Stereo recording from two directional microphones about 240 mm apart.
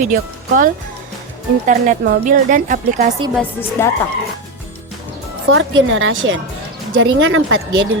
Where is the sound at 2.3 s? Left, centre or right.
Right.